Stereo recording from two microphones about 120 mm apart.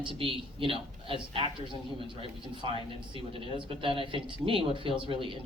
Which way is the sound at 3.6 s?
45° right (ahead or behind).